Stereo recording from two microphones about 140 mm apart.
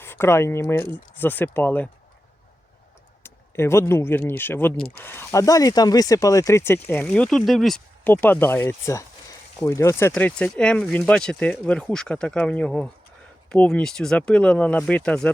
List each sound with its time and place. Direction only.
0.0 s speech: 15° left (ahead or behind)
3.2 s speech: 15° left (ahead or behind); by 7.8 s centre (ahead or behind)
8.0 s speech: 15° left (ahead or behind)
10.2 s speech: 10° left (ahead or behind)